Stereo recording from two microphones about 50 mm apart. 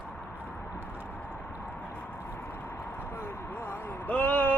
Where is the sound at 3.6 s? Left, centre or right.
Left.